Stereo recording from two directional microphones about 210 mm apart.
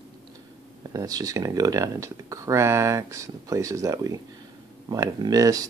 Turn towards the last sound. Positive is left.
turn(degrees=-15)  # may be behind; listen again after turning